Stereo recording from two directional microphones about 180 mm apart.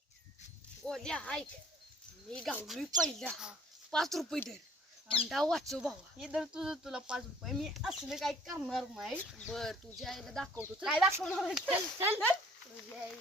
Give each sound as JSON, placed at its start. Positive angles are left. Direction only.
{"t": 0.9, "sound": "speech", "side_deg": 5}
{"t": 5.0, "sound": "speech", "side_deg": 30}
{"t": 5.3, "sound": "speech", "side_deg": 0}